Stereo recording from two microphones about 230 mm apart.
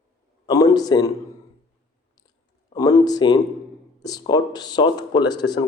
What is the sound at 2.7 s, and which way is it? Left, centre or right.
Speech, centre.